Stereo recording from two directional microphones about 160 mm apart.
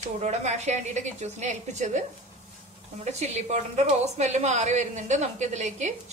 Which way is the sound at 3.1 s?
45° right (ahead or behind).